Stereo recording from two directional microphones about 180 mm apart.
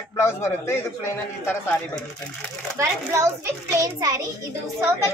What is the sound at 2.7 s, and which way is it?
A child's voice, 15° right (ahead or behind).